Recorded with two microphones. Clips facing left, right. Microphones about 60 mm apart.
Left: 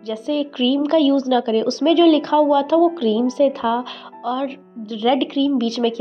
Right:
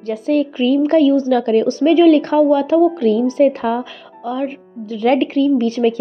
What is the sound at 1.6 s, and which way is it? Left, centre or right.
Speech, right.